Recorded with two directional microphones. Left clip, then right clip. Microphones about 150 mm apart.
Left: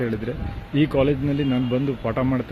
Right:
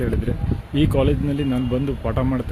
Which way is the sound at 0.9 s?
5° right (ahead or behind).